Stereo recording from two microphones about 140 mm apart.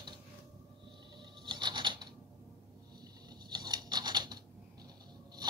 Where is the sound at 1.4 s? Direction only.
35° right (ahead or behind).